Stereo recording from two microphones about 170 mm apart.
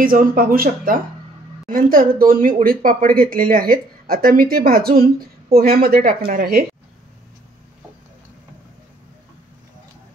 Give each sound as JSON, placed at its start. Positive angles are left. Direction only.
{"t": 0.0, "sound": "speech", "side_deg": -55}